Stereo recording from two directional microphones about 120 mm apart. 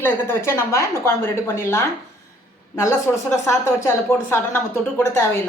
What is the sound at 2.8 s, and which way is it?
A woman's voice, 25° left (ahead or behind).